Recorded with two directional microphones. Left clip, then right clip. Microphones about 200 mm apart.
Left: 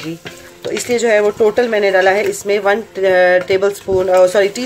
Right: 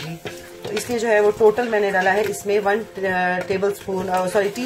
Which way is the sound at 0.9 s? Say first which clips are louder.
Left 5 dB; 30° left (ahead or behind).